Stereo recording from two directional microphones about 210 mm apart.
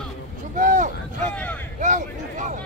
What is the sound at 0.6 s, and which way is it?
Vehicle, 40° right (ahead or behind).